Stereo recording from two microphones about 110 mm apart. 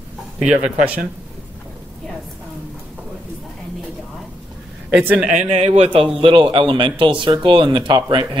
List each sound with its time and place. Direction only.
0.4 s speech: 5° right (ahead or behind)
4.9 s speech: 10° right (ahead or behind)
5.4 s speech: 60° right (ahead or behind)